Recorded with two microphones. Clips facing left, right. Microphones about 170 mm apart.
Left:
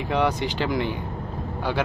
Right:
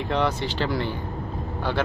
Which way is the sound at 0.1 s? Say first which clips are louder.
Left 2 dB; 10° left (ahead or behind).